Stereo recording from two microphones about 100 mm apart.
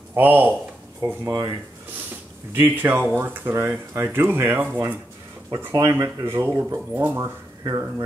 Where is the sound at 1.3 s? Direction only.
35° right (ahead or behind).